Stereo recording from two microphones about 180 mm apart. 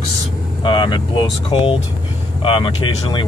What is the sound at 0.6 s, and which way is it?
Speech, 25° left (ahead or behind).